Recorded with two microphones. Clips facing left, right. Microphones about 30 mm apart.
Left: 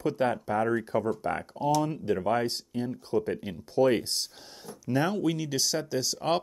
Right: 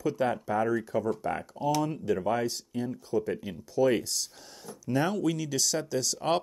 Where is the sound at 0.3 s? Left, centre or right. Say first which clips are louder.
Left 1 dB; centre.